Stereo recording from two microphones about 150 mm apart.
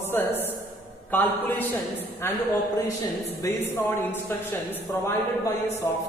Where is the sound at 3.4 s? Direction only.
20° left (ahead or behind).